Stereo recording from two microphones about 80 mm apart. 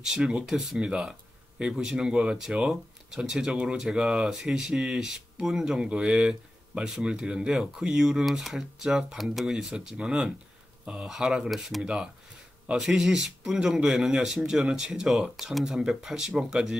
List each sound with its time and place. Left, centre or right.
0.0 s speech: centre